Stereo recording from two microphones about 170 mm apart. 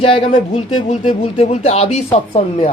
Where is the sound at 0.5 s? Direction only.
35° left (ahead or behind).